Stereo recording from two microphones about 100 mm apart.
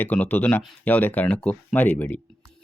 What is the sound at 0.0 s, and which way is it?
Speech, 15° left (ahead or behind).